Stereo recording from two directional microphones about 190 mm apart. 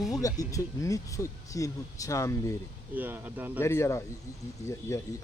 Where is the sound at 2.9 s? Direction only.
10° right (ahead or behind).